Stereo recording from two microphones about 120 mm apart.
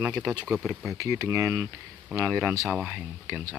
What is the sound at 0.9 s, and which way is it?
Speech, 25° right (ahead or behind).